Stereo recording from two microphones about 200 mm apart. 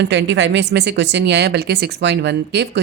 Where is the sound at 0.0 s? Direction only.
60° right (ahead or behind).